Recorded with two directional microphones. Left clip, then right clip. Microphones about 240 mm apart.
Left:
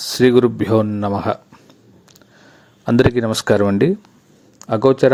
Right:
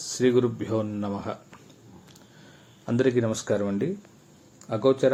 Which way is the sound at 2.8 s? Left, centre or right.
Left.